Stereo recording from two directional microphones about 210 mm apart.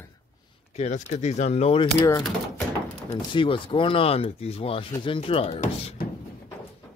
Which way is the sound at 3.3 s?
25° left (ahead or behind).